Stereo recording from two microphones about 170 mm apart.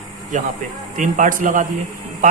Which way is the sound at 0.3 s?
45° right (ahead or behind).